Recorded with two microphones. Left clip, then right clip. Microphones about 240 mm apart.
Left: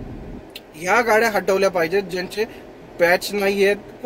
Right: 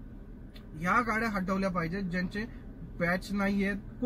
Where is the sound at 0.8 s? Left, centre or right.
Centre.